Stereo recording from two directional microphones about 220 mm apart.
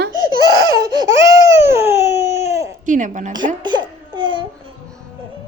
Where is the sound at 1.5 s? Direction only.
10° right (ahead or behind).